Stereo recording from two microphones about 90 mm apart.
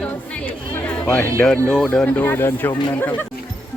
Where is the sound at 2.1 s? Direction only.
25° left (ahead or behind).